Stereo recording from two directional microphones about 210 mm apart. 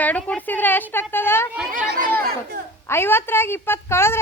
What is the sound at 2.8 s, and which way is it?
A woman's voice, 10° left (ahead or behind).